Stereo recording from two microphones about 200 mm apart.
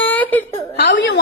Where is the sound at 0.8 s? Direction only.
60° left (ahead or behind).